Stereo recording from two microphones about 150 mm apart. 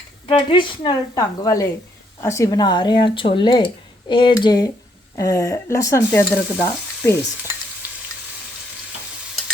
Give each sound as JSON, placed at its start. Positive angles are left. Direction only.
{"t": 0.3, "sound": "speech", "side_deg": 35}